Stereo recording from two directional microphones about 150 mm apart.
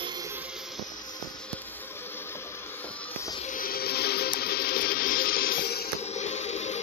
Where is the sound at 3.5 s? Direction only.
75° left (ahead or behind).